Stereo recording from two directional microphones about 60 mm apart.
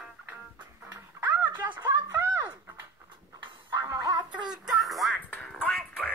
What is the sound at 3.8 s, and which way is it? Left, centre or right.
Music, right.